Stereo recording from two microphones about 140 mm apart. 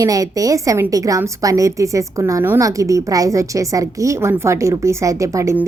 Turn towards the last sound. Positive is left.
turn(degrees=-20)  # may be behind; listen again after turning